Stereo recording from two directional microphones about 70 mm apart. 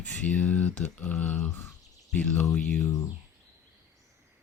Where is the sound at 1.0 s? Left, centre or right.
Centre.